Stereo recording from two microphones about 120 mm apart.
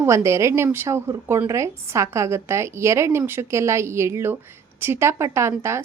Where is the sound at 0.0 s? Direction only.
25° right (ahead or behind).